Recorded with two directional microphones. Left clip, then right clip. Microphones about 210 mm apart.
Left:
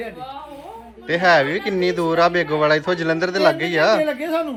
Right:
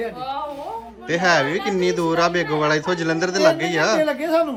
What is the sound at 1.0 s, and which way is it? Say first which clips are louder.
A woman's voice: left 3 dB; 10° right (ahead or behind).